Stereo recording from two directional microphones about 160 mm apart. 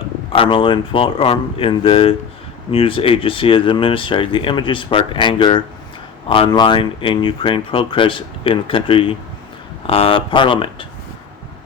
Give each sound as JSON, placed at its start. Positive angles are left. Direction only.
{"t": 0.3, "sound": "speech", "side_deg": 35}